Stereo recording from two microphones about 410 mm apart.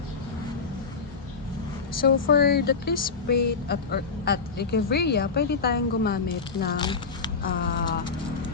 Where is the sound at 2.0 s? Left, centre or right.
Left.